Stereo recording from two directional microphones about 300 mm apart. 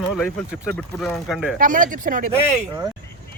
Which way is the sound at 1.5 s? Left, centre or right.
Right.